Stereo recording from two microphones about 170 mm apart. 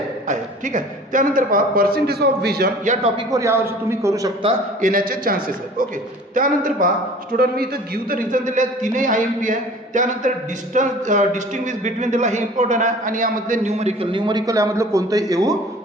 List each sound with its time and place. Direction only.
0.3 s a man's voice: 50° right (ahead or behind); by 2.6 s 70° right (ahead or behind)
2.8 s a man's voice: 45° right (ahead or behind)
3.2 s a man's voice: 20° right (ahead or behind)
4.8 s a man's voice: 55° right (ahead or behind); by 15.5 s 20° right (ahead or behind)